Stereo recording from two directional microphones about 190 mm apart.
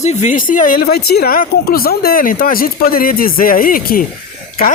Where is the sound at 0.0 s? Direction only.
40° left (ahead or behind).